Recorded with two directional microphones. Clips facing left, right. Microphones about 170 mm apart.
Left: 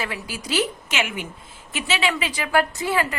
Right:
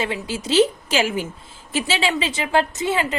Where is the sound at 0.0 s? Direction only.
25° right (ahead or behind).